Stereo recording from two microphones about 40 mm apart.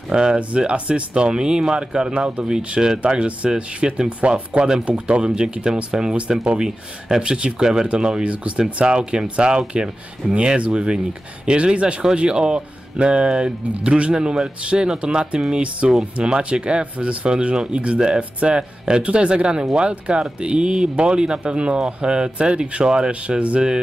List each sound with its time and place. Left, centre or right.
0.1 s speech: centre
0.6 s speech: right